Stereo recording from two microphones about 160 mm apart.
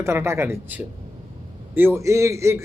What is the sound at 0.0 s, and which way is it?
A man's voice, 15° right (ahead or behind).